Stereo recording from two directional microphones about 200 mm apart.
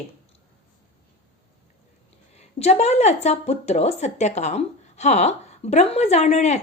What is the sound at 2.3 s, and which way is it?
A woman's voice, 35° left (ahead or behind).